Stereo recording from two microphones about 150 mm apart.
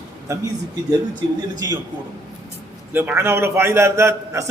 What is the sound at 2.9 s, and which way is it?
A man's voice, 15° right (ahead or behind).